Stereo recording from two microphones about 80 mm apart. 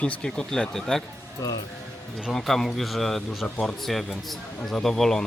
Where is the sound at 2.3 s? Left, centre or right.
Centre.